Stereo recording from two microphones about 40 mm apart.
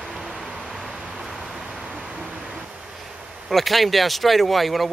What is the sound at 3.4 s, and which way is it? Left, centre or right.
Speech, centre.